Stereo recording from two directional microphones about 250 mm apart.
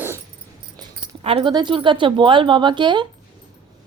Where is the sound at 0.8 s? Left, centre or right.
Right.